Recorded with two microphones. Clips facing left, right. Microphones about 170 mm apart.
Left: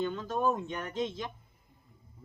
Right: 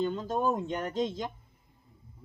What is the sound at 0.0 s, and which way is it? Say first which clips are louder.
Speech: right 1 dB; 35° right (ahead or behind).